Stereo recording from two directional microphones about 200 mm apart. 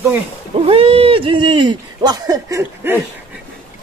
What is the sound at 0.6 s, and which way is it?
Speech, 30° right (ahead or behind).